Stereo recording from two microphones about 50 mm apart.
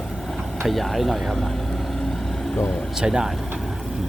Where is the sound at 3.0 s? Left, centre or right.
Centre.